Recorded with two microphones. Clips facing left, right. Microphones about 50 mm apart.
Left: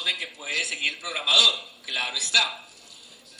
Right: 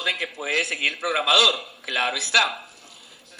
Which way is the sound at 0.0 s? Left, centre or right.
Right.